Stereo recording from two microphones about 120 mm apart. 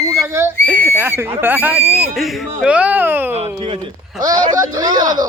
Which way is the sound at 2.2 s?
Centre (ahead or behind).